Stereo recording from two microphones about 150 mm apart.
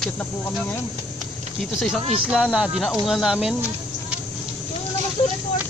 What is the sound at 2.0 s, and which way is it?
Speech, 40° right (ahead or behind).